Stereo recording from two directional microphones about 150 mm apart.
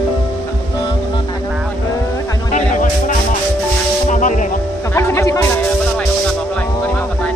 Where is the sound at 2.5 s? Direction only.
60° left (ahead or behind).